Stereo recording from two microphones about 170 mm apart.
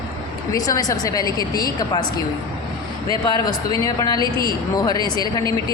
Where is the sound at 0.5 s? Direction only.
20° left (ahead or behind).